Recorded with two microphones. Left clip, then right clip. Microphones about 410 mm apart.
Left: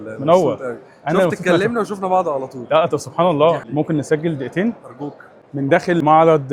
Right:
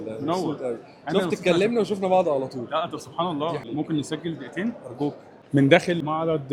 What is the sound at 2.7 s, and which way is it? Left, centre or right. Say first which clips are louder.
Speech: left 14 dB; left.